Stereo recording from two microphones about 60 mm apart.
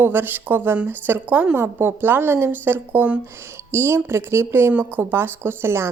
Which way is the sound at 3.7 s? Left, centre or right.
Right.